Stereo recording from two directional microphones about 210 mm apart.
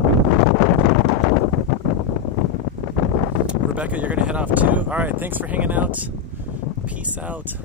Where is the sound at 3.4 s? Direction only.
5° right (ahead or behind).